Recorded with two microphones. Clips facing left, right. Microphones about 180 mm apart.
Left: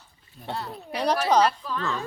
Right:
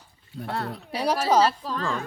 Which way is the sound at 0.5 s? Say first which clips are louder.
Right 3 dB; 65° right (ahead or behind).